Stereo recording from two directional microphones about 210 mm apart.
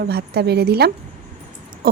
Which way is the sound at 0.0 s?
50° right (ahead or behind).